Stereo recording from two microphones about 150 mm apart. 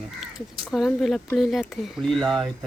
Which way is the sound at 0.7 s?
Centre (ahead or behind).